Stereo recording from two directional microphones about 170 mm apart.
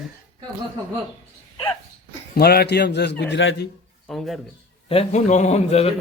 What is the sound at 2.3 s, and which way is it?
A man's voice, 65° left (ahead or behind).